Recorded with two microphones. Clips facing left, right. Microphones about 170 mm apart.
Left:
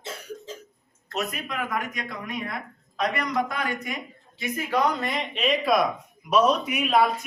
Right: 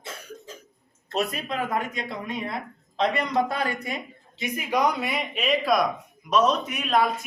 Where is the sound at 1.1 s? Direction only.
30° right (ahead or behind).